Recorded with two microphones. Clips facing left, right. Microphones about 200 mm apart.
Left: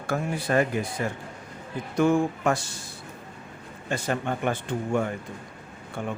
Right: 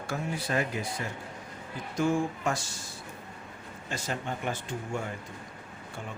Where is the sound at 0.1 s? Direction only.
55° left (ahead or behind).